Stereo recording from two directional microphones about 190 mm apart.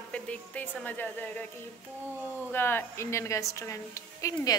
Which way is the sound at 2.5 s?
10° left (ahead or behind).